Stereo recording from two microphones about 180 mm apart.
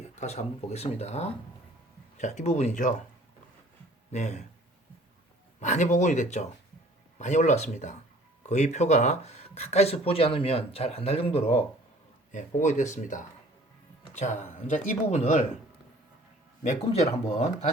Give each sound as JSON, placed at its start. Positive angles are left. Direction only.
{"t": 0.2, "sound": "speech", "side_deg": 35}
{"t": 4.1, "sound": "speech", "side_deg": 40}
{"t": 5.5, "sound": "speech", "side_deg": 40}
{"t": 16.6, "sound": "speech", "side_deg": 35}